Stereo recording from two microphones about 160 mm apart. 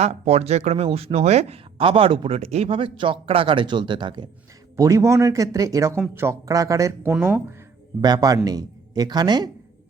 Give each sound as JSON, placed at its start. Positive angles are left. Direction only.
{"t": 0.0, "sound": "speech", "side_deg": -40}
{"t": 8.0, "sound": "speech", "side_deg": -25}